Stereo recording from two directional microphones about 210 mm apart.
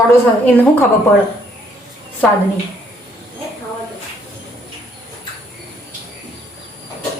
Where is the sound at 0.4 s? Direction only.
10° left (ahead or behind).